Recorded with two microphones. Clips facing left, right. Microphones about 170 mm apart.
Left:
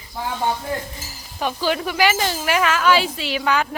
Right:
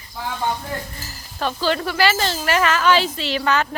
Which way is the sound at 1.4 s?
15° left (ahead or behind).